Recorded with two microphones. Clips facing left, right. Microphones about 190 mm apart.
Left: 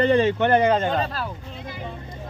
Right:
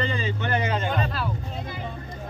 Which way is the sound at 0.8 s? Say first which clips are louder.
Left 3 dB; 35° left (ahead or behind).